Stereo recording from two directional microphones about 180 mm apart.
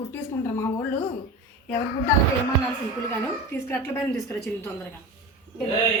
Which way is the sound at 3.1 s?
10° left (ahead or behind).